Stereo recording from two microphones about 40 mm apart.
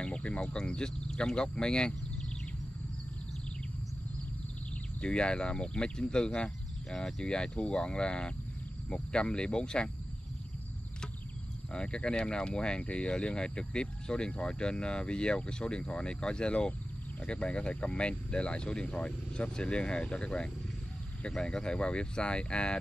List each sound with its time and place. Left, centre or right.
0.0 s speech: left
5.0 s speech: left
11.7 s speech: left